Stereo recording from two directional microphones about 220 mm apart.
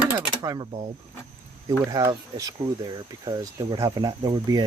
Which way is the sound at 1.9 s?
15° right (ahead or behind).